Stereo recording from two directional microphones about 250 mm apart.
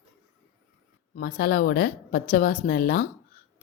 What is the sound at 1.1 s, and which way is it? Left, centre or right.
A woman's voice, left.